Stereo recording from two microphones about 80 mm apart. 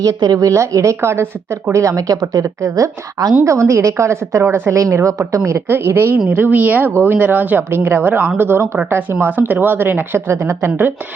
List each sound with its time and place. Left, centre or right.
0.0 s a woman's voice: right
4.8 s a woman's voice: right